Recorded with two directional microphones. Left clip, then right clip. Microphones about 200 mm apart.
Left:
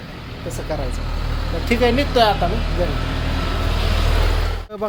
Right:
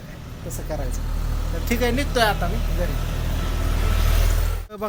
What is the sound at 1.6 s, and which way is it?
Speech, 5° left (ahead or behind).